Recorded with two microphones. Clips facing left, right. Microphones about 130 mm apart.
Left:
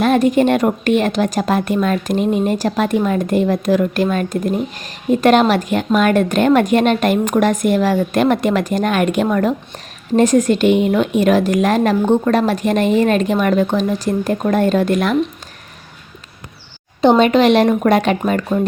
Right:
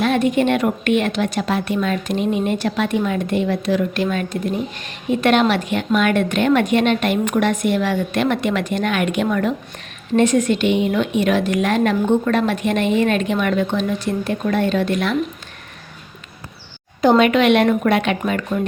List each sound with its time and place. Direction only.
0.0 s a woman's voice: 40° left (ahead or behind)
17.0 s a woman's voice: 30° left (ahead or behind)